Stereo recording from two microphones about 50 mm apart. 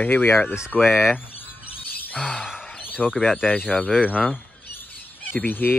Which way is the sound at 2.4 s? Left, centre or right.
Centre.